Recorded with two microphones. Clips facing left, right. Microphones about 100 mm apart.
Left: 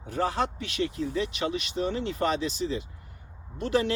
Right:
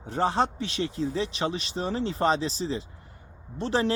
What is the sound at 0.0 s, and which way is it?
Speech, 30° right (ahead or behind).